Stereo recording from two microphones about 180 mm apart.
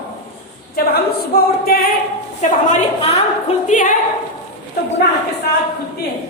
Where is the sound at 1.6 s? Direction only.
55° left (ahead or behind).